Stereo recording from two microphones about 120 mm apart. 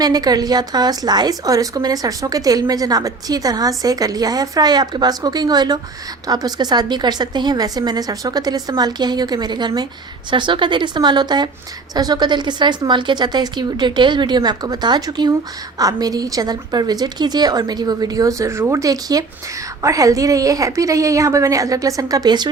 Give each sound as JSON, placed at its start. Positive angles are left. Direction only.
{"t": 0.0, "sound": "a woman's voice", "side_deg": -35}